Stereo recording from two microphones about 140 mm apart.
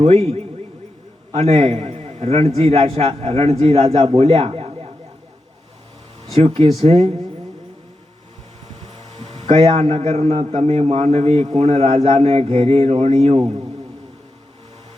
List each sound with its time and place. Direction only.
1.3 s a man's voice: 50° right (ahead or behind)
6.3 s a man's voice: 45° right (ahead or behind)
9.1 s a man's voice: 40° right (ahead or behind)